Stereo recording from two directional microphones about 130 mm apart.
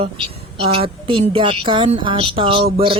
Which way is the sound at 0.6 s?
50° right (ahead or behind).